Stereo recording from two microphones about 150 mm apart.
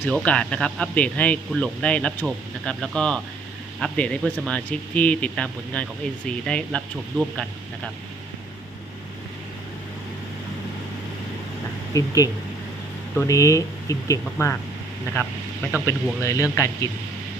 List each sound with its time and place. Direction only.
0.1 s speech: 10° left (ahead or behind)
11.9 s speech: 20° left (ahead or behind)
15.8 s speech: 20° left (ahead or behind)